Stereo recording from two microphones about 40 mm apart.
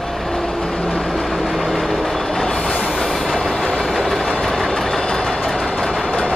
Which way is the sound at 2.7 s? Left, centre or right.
Centre.